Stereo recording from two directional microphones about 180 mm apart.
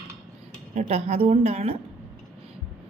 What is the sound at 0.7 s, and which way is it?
Speech, 40° right (ahead or behind).